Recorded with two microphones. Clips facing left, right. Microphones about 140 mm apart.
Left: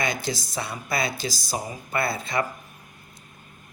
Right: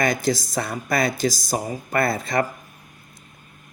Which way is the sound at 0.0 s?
45° right (ahead or behind).